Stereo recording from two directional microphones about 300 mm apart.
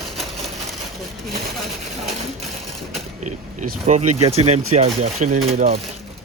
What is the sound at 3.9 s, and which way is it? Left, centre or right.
Speech, right.